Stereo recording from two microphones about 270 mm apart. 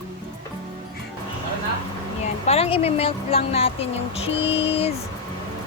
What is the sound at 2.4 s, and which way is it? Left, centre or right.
A woman's voice, left.